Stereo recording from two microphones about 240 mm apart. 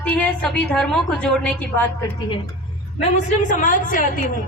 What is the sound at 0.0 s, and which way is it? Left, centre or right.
A woman's voice, centre.